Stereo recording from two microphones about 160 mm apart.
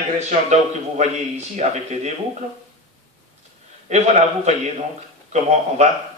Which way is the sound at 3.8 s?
45° right (ahead or behind).